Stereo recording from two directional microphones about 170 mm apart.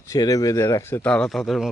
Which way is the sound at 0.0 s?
20° left (ahead or behind).